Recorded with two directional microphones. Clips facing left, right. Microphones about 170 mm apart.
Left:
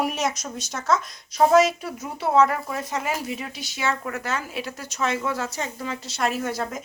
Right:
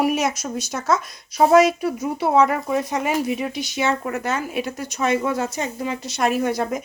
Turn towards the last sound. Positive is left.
turn(degrees=-15)  # may be behind; listen again after turning